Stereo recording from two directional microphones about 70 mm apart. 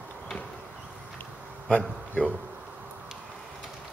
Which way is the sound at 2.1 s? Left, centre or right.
Centre.